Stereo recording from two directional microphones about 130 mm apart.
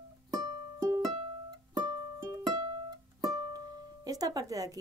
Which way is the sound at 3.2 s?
30° right (ahead or behind).